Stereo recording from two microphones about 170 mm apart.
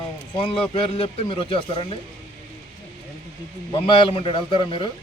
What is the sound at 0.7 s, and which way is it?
Speech, 30° left (ahead or behind).